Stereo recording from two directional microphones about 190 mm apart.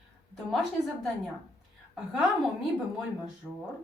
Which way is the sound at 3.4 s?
5° left (ahead or behind).